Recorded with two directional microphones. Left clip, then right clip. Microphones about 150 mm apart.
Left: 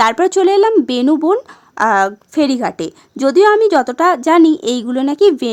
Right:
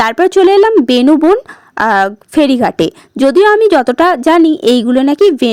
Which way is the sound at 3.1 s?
25° right (ahead or behind).